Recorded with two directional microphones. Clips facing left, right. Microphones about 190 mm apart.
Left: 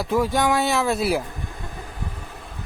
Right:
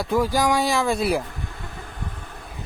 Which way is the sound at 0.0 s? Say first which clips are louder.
Even; centre (ahead or behind).